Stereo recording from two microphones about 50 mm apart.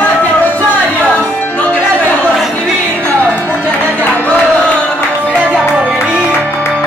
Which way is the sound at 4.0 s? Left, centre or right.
Left.